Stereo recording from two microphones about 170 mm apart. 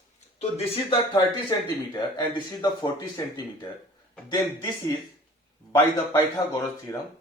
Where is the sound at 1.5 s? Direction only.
25° left (ahead or behind).